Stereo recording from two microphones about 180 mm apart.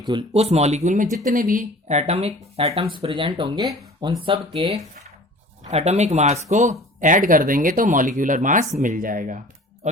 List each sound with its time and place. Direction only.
0.1 s speech: 30° right (ahead or behind)